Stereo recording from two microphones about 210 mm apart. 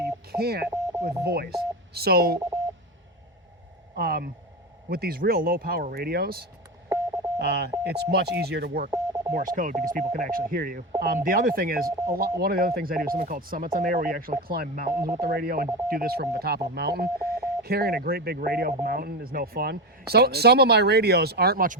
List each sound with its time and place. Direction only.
0.3 s speech: 45° right (ahead or behind)
3.9 s speech: 45° right (ahead or behind)
6.9 s telephone dialing: 15° right (ahead or behind)
7.3 s speech: 50° right (ahead or behind)
8.9 s telephone dialing: 15° right (ahead or behind)
9.3 s speech: 40° right (ahead or behind)